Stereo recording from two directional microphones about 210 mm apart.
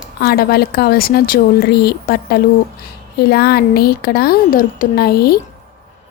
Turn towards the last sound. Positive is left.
turn(degrees=50)  # may be behind; listen again after turning